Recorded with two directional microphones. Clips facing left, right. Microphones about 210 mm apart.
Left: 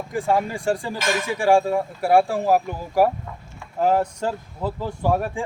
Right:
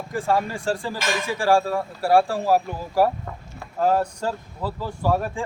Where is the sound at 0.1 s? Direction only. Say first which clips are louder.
Left 1 dB; 15° left (ahead or behind).